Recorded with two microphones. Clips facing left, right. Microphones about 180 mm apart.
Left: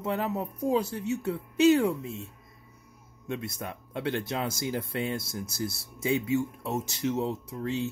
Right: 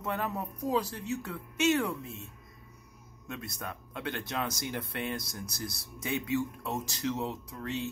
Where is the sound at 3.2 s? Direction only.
25° left (ahead or behind).